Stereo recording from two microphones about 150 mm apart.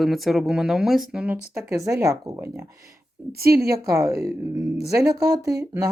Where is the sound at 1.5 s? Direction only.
20° right (ahead or behind).